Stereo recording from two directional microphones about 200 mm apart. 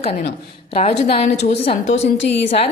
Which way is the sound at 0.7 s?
30° left (ahead or behind).